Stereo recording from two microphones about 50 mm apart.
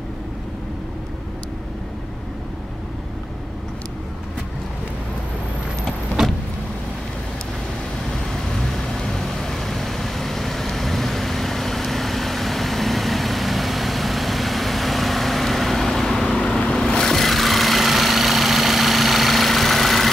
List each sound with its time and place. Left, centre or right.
6.2 s vehicle: centre
8.5 s vehicle: centre
16.3 s vehicle: left; by 20.1 s centre